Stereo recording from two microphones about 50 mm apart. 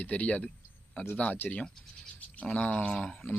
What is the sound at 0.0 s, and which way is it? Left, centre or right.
Speech, left.